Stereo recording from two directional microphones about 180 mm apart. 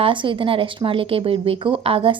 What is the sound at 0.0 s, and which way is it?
Speech, 25° right (ahead or behind).